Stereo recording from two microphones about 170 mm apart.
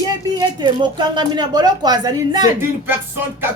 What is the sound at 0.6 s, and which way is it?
A woman's voice, 25° right (ahead or behind).